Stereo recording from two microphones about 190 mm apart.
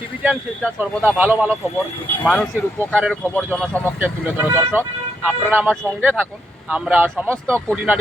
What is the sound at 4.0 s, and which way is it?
Speech, 10° right (ahead or behind).